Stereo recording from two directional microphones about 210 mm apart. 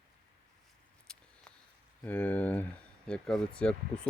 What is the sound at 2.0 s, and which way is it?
Speech, 10° left (ahead or behind).